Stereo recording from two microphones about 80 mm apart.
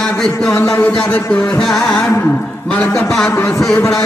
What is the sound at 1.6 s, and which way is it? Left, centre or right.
Speech, centre.